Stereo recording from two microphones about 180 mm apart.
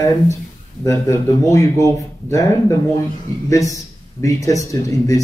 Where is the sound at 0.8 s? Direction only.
15° left (ahead or behind).